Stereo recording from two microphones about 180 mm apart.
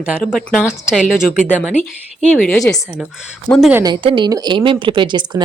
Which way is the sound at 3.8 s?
25° right (ahead or behind).